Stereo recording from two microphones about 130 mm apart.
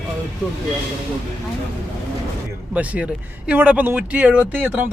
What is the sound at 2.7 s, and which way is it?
Speech, 10° right (ahead or behind).